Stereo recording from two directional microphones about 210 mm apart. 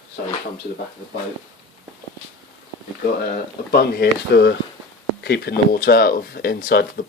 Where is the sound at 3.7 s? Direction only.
50° left (ahead or behind).